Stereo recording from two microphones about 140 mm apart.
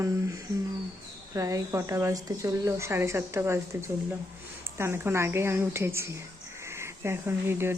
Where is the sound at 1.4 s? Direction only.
25° right (ahead or behind).